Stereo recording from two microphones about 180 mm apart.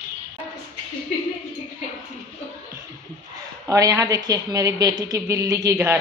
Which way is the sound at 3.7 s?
20° right (ahead or behind).